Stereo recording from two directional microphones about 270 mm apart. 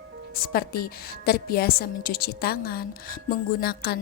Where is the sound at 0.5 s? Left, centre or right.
Left.